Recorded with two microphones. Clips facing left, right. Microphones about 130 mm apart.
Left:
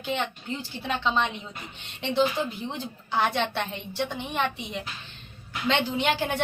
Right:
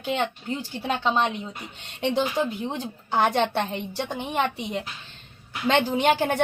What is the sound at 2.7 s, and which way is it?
A woman's voice, 45° right (ahead or behind).